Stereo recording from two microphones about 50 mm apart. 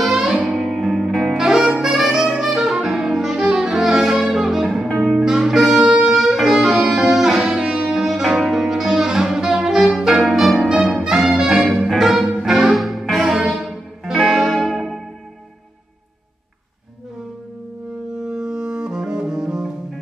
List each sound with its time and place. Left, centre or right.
0.0 s music: centre
1.3 s saxophone: centre
3.4 s music: centre
5.8 s saxophone: centre
6.1 s music: centre
18.2 s music: centre